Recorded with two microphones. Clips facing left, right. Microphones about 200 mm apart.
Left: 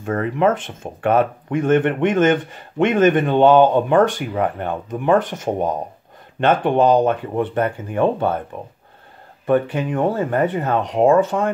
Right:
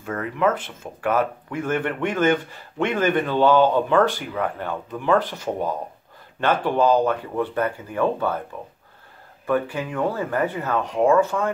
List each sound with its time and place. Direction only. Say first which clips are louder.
0.0 s speech: left 4 dB; 30° left (ahead or behind)
9.5 s speech: left 5 dB; 20° left (ahead or behind)